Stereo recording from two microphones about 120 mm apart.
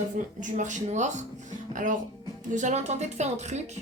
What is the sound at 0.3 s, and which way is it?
Speech, 90° right.